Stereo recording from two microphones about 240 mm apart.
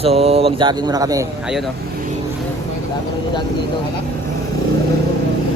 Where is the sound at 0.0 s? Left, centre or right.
Right.